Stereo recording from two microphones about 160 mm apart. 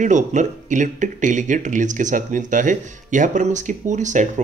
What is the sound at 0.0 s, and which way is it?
Speech, 50° right (ahead or behind).